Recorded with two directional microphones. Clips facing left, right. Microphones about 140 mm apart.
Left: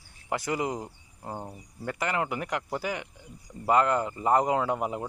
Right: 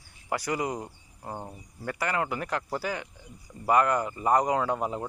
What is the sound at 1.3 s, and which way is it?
Speech, 10° left (ahead or behind).